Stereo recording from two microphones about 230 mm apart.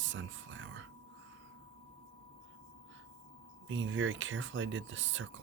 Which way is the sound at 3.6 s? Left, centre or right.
Right.